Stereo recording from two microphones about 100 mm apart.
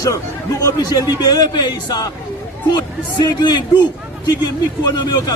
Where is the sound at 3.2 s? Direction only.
45° left (ahead or behind).